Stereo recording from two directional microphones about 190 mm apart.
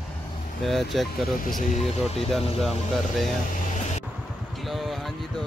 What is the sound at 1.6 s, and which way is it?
Speech, 40° left (ahead or behind).